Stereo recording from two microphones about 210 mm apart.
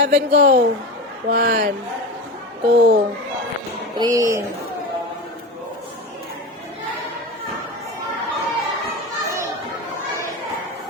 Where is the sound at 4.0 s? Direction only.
15° right (ahead or behind).